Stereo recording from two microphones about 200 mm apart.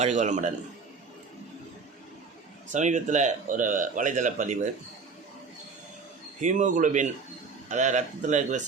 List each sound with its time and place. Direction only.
0.0 s a man's voice: 35° right (ahead or behind)
2.7 s a man's voice: 35° right (ahead or behind)
6.4 s a man's voice: 40° right (ahead or behind)